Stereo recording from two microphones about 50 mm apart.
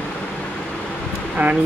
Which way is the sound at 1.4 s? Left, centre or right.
Right.